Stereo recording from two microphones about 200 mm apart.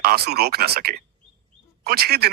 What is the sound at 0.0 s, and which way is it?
A man's voice, 50° right (ahead or behind).